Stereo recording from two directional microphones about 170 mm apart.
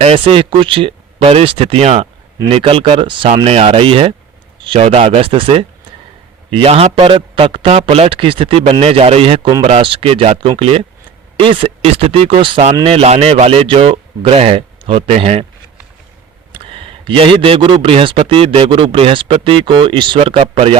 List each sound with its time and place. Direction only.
0.0 s speech: 35° right (ahead or behind)
16.5 s speech: 30° right (ahead or behind)